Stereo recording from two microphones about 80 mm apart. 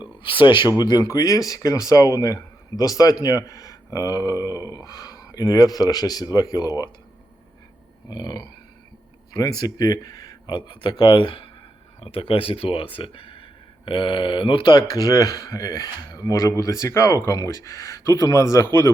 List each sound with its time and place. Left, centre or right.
0.2 s speech: left
0.7 s speech: left
8.1 s speech: left
12.8 s speech: left